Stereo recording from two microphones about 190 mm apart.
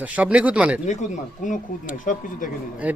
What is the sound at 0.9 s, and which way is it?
Speech, 40° left (ahead or behind).